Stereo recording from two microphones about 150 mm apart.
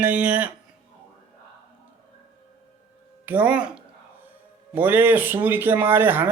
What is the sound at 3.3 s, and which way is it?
Speech, 10° right (ahead or behind).